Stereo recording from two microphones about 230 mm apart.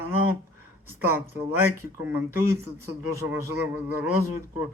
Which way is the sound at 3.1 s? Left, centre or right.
Centre.